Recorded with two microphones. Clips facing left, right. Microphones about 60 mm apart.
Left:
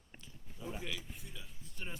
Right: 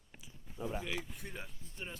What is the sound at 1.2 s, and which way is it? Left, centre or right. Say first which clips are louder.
Speech: right 6 dB; right.